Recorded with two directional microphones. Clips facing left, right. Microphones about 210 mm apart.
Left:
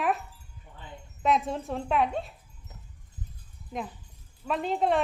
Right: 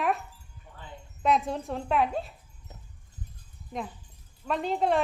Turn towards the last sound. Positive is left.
turn(degrees=0)  # may be behind; listen again after turning